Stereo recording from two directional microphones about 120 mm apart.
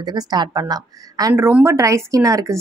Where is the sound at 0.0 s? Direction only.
35° right (ahead or behind).